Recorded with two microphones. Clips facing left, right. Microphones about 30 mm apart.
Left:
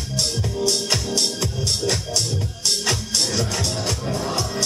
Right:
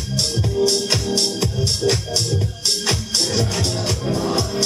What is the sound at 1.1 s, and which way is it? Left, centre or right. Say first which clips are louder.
Music: right 3 dB; centre.